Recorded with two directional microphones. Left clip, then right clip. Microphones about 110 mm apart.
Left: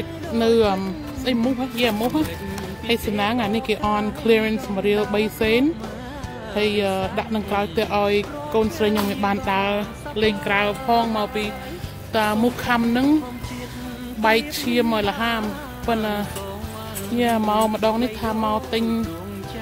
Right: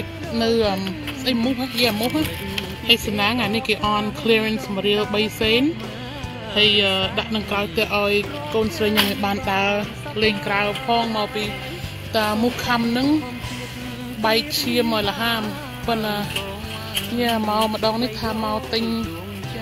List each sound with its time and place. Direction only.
0.3 s speech: 20° left (ahead or behind)
1.3 s speech: 5° left (ahead or behind); by 13.1 s 25° left (ahead or behind)
14.2 s speech: 25° left (ahead or behind)
17.5 s speech: 25° left (ahead or behind)